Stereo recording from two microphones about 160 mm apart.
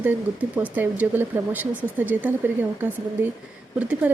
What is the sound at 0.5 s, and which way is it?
Speech, 10° right (ahead or behind).